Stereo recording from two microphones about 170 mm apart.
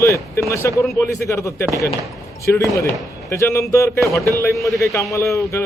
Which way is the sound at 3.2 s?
15° left (ahead or behind).